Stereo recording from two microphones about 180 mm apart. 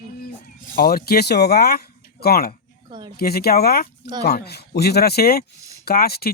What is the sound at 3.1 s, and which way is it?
Speech, 60° left (ahead or behind).